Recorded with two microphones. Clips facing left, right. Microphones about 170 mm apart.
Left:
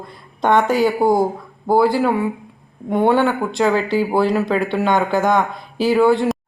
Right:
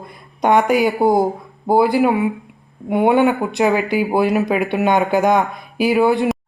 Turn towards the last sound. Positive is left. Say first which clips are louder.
# even
turn(degrees=-15)  # may be behind; listen again after turning